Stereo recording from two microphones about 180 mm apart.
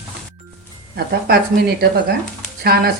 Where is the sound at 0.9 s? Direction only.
60° right (ahead or behind).